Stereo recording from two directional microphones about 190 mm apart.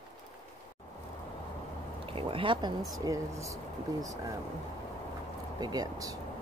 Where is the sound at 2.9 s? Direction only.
15° right (ahead or behind).